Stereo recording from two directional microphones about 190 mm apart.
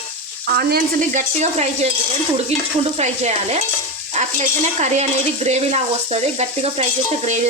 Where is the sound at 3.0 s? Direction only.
35° right (ahead or behind).